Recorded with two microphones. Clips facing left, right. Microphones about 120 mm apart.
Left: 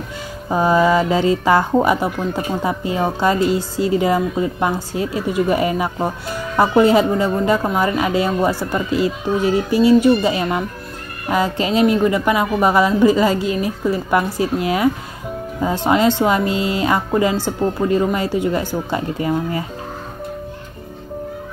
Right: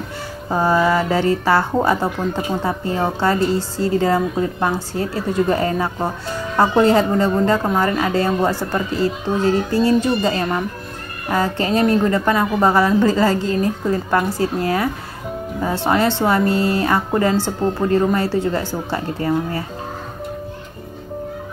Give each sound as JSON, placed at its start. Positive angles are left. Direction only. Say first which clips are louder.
{"t": 0.5, "sound": "speech", "louder": "left 2 dB", "side_deg": 15}